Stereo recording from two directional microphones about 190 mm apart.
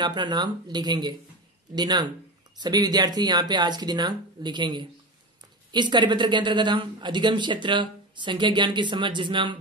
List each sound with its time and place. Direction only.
0.0 s speech: 25° right (ahead or behind)